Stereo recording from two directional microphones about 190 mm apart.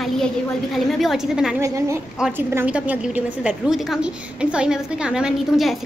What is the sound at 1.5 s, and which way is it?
A woman's voice, 15° right (ahead or behind).